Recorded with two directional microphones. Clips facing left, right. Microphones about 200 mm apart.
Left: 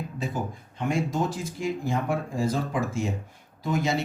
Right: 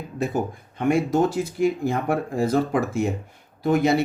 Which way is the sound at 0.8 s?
65° right (ahead or behind).